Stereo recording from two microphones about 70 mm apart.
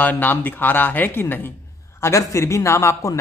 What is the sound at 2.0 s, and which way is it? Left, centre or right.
A man's voice, left.